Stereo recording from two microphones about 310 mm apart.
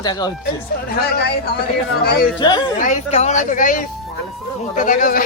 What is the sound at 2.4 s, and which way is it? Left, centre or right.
Speech, centre.